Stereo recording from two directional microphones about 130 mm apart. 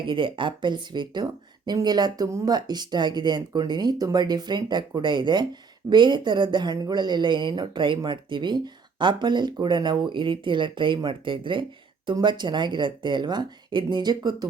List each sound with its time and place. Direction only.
0.0 s speech: 40° right (ahead or behind)